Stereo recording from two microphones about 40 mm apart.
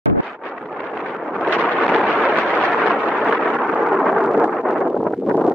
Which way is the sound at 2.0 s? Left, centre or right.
Right.